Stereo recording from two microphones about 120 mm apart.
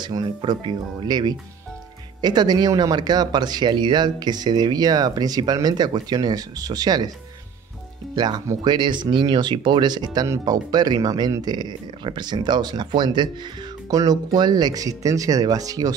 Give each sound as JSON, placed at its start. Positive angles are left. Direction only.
{"t": 0.0, "sound": "speech", "side_deg": -35}
{"t": 8.2, "sound": "speech", "side_deg": -35}